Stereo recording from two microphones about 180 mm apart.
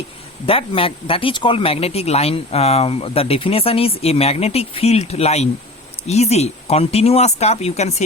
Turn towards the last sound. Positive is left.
turn(degrees=35)  # may be behind; listen again after turning